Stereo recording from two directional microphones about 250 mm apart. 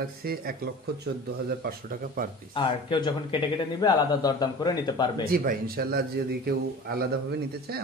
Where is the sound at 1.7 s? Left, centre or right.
Right.